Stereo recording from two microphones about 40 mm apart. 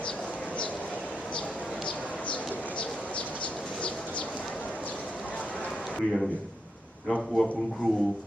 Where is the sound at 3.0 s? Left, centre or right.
Left.